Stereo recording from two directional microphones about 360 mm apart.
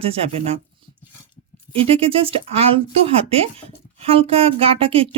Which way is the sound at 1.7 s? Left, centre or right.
Centre.